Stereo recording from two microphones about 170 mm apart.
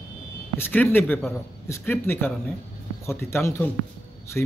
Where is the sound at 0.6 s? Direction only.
10° left (ahead or behind).